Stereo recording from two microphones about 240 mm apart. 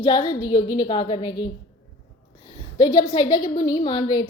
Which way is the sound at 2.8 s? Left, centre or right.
Centre.